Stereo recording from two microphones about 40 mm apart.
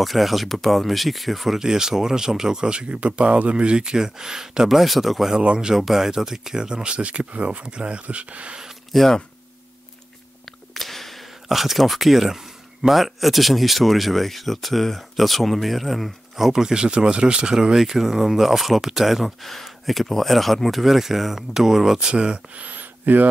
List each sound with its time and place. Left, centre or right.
0.0 s speech: centre
1.6 s speech: centre
4.6 s speech: centre
5.4 s speech: right
5.7 s speech: centre; by 8.5 s right
8.9 s speech: centre
10.7 s a sound: centre
11.4 s speech: centre
16.4 s speech: centre
16.8 s speech: right
17.7 s speech: centre
22.0 s speech: right
22.6 s a sound: right